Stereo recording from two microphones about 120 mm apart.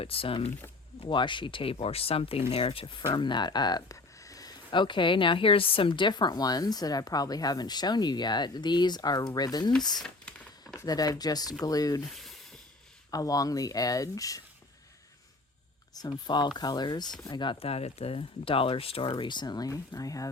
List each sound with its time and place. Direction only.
0.0 s speech: 50° left (ahead or behind)
3.1 s speech: 40° left (ahead or behind)
4.7 s a woman's voice: 40° left (ahead or behind)
10.0 s a sound: 5° left (ahead or behind)
10.8 s a woman's voice: 30° left (ahead or behind)
12.0 s speech: centre (ahead or behind)
13.1 s speech: 30° left (ahead or behind)
16.0 s a woman's voice: 40° left (ahead or behind)